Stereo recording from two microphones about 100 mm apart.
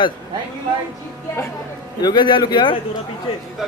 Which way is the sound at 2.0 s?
45° left (ahead or behind).